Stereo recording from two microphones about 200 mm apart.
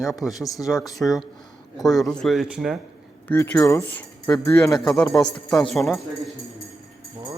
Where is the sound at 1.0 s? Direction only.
Centre (ahead or behind).